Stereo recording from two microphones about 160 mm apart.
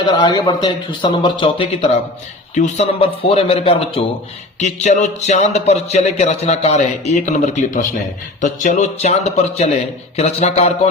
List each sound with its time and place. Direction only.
0.0 s speech: 25° left (ahead or behind)
4.6 s speech: 45° left (ahead or behind)